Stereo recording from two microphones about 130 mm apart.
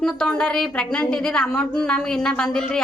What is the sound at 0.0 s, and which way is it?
A woman's voice, 5° left (ahead or behind).